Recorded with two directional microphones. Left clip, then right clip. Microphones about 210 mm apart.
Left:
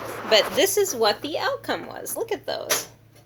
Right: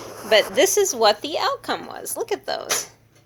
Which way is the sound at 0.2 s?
30° right (ahead or behind).